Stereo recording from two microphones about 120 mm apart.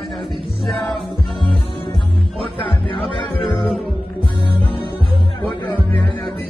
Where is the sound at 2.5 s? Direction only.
50° left (ahead or behind).